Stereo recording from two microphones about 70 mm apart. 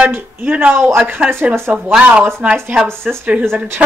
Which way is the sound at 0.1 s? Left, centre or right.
Right.